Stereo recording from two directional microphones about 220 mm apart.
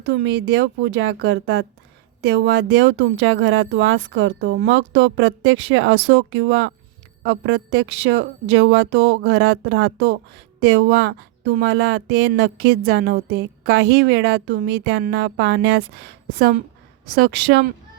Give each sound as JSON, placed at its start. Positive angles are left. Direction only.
{"t": 0.0, "sound": "a woman's voice", "side_deg": -55}